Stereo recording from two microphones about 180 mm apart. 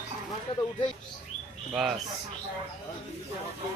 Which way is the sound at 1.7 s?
Centre (ahead or behind).